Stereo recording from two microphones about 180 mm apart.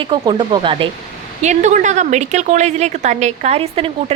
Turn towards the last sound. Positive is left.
turn(degrees=-35)  # may be behind; listen again after turning